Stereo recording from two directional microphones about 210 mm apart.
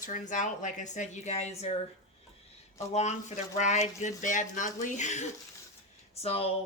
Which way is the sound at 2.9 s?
35° left (ahead or behind).